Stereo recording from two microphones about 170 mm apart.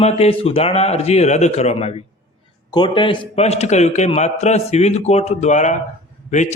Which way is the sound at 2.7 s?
25° left (ahead or behind).